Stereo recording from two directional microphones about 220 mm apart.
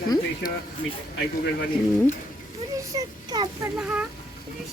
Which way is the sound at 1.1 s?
50° left (ahead or behind).